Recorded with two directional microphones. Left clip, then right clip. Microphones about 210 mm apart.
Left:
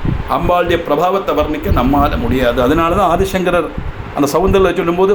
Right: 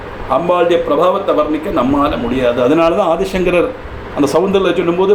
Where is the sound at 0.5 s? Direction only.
35° left (ahead or behind).